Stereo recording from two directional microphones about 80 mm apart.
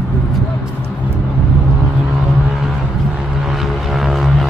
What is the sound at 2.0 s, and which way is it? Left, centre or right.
Vehicle, centre.